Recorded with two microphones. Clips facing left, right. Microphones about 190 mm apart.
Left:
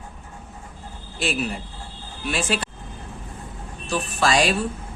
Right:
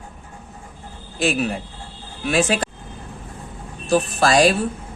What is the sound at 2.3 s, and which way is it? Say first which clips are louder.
Speech: right 6 dB; 45° right (ahead or behind).